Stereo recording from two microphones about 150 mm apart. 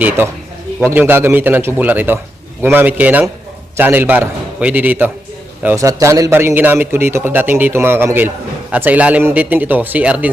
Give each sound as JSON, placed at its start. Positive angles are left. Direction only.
{"t": 0.2, "sound": "a man's voice", "side_deg": -15}
{"t": 5.6, "sound": "a man's voice", "side_deg": -20}